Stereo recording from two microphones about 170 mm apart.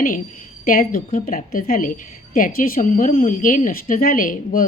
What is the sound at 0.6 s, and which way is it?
Speech, 55° left (ahead or behind).